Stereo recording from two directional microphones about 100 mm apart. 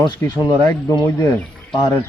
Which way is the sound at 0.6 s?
35° left (ahead or behind).